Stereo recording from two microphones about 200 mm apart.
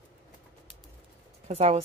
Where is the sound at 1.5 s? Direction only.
30° right (ahead or behind).